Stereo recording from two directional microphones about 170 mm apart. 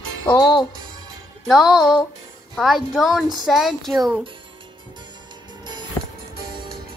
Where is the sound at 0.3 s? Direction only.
25° left (ahead or behind).